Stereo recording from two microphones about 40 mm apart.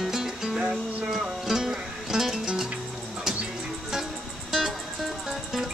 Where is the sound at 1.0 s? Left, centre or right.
Centre.